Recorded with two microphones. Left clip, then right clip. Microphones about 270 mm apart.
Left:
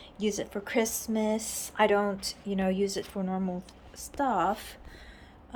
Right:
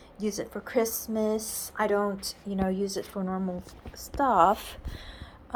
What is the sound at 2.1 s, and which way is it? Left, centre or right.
Speech, centre.